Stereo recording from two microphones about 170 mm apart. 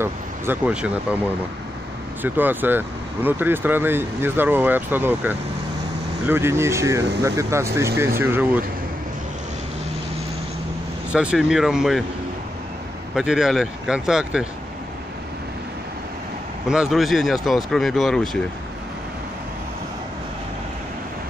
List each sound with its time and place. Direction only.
0.0 s speech: 10° right (ahead or behind)
2.2 s speech: 10° right (ahead or behind)
11.1 s speech: 5° right (ahead or behind)
13.1 s speech: 5° right (ahead or behind)
16.6 s speech: 5° right (ahead or behind)